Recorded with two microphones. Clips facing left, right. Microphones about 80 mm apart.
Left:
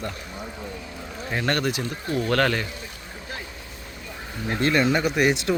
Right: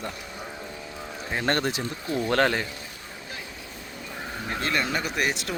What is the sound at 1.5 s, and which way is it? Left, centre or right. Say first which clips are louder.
Speech: left 1 dB; right.